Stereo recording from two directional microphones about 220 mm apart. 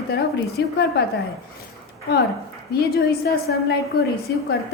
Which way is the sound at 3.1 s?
45° left (ahead or behind).